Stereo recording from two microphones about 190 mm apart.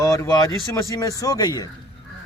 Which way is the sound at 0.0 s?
15° left (ahead or behind).